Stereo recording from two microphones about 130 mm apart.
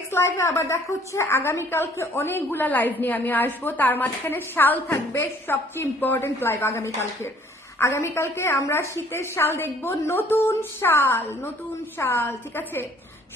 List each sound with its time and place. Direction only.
0.1 s a woman's voice: 20° left (ahead or behind)